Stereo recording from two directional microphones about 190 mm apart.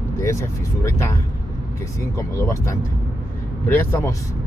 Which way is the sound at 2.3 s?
15° left (ahead or behind).